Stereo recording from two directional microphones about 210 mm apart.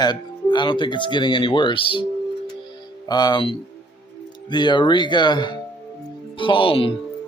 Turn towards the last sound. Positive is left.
turn(degrees=25)  # may be behind; listen again after turning